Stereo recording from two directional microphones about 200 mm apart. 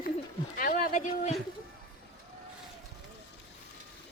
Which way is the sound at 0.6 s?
45° left (ahead or behind).